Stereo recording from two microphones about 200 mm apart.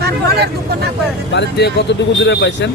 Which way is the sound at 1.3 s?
55° left (ahead or behind).